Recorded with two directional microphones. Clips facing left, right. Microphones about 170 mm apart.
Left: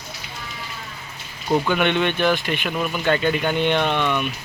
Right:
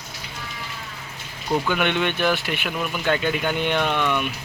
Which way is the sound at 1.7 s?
10° right (ahead or behind).